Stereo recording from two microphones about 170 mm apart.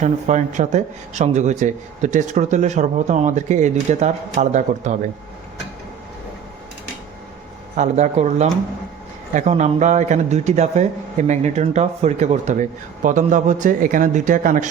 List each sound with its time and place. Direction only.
0.0 s speech: 45° right (ahead or behind)
7.8 s speech: 45° right (ahead or behind)